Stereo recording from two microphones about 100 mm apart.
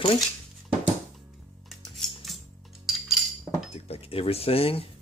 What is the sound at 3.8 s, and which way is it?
Speech, 75° left (ahead or behind).